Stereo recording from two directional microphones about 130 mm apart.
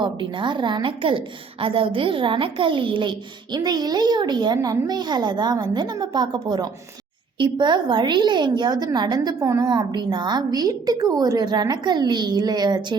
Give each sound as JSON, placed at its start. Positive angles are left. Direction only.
{"t": 0.0, "sound": "a woman's voice", "side_deg": -40}